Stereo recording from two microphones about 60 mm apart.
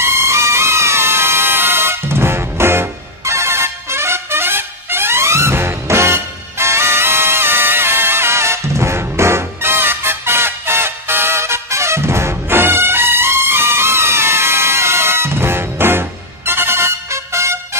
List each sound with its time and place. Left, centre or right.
0.0 s music: right